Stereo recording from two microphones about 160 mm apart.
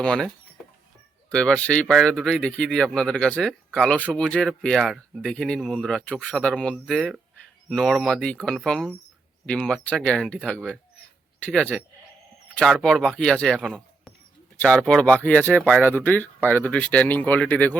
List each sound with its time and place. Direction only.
0.0 s speech: 5° left (ahead or behind)
1.3 s speech: 5° left (ahead or behind)